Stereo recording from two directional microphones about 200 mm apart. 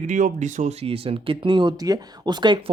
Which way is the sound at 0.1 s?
40° right (ahead or behind).